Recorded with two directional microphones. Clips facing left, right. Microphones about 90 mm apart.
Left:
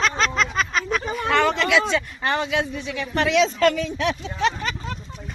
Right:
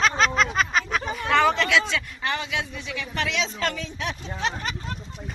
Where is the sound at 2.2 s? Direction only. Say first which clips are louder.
Left 5 dB; 45° left (ahead or behind); by 4.5 s 75° left (ahead or behind).